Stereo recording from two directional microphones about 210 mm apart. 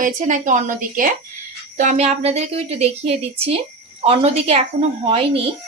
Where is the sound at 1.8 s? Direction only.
35° right (ahead or behind).